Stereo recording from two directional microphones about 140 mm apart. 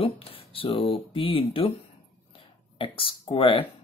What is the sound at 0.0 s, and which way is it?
Speech, 40° left (ahead or behind).